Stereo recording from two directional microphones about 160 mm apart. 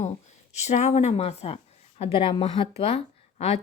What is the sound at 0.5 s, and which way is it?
A woman's voice, 45° left (ahead or behind).